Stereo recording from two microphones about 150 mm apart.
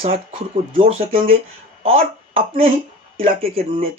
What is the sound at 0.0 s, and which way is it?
Speech, 40° right (ahead or behind).